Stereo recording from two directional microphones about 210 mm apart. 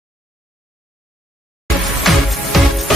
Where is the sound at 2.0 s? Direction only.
Centre (ahead or behind).